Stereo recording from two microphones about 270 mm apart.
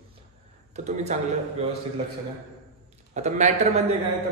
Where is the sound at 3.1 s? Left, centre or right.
Right.